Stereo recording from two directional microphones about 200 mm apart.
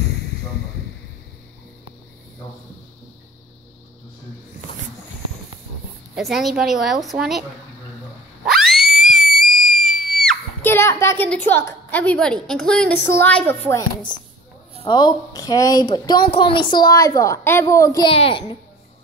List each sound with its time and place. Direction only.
6.1 s a woman's voice: centre (ahead or behind)
8.5 s screaming: centre (ahead or behind)
10.6 s a woman's voice: 10° left (ahead or behind); by 18.4 s 30° left (ahead or behind)